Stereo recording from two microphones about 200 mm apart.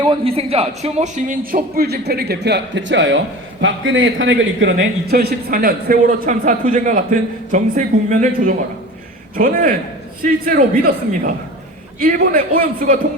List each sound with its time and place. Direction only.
0.0 s a man's voice: 25° right (ahead or behind); by 4.9 s 65° right (ahead or behind)
5.1 s a man's voice: 45° right (ahead or behind)